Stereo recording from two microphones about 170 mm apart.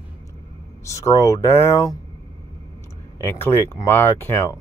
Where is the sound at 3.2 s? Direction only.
10° left (ahead or behind).